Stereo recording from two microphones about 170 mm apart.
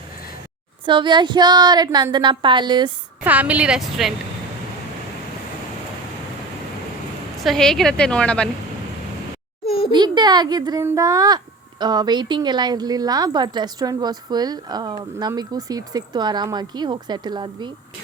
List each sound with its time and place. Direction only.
0.9 s speech: 30° right (ahead or behind)
3.2 s a woman's voice: 10° right (ahead or behind)
7.3 s a woman's voice: centre (ahead or behind)
9.6 s a sound: 35° left (ahead or behind)
9.9 s speech: 25° right (ahead or behind)